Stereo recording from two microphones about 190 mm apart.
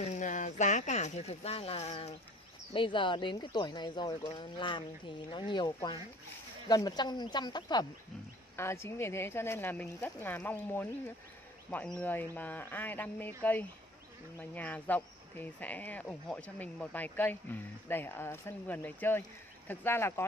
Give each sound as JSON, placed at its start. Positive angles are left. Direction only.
{"t": 0.1, "sound": "speech", "side_deg": 40}
{"t": 12.0, "sound": "speech", "side_deg": 10}